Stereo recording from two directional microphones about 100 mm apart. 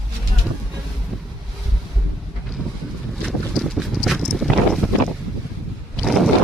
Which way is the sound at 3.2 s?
Centre (ahead or behind).